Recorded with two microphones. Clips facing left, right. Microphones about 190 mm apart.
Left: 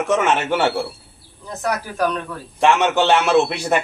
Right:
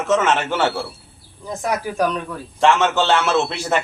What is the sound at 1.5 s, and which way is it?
Speech, 15° right (ahead or behind).